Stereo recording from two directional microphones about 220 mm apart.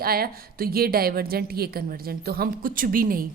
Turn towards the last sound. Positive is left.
turn(degrees=-40)  # may be behind; listen again after turning